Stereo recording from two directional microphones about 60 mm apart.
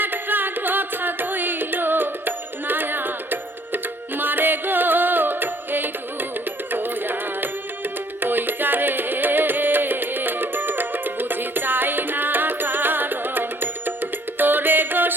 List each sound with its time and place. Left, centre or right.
0.0 s music: right